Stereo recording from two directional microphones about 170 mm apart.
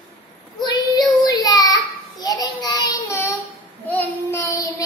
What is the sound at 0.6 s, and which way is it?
Child singing, 25° left (ahead or behind).